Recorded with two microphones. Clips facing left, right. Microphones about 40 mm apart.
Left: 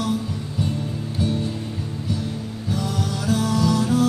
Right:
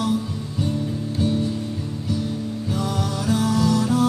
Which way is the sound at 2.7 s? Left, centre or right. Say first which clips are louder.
Even; centre.